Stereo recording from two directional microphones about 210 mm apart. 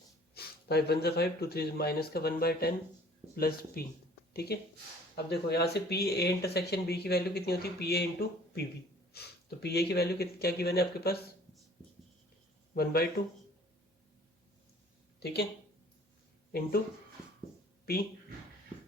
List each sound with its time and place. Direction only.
0.3 s speech: 50° left (ahead or behind)
12.7 s speech: 45° left (ahead or behind)
15.2 s speech: 50° left (ahead or behind)
16.5 s speech: 45° left (ahead or behind)